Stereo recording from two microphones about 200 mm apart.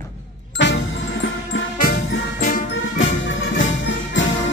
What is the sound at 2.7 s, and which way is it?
Music, 70° left (ahead or behind).